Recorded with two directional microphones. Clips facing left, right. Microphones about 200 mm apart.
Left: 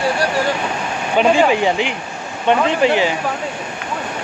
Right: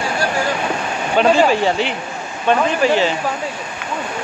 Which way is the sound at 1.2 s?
15° left (ahead or behind).